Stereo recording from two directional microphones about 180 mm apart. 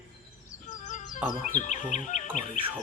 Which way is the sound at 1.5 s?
45° left (ahead or behind).